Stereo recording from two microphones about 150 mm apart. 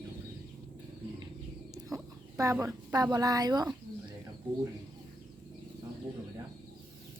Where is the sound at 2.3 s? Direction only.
20° right (ahead or behind).